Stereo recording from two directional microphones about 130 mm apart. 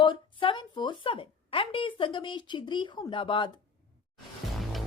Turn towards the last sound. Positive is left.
turn(degrees=40)  # may be behind; listen again after turning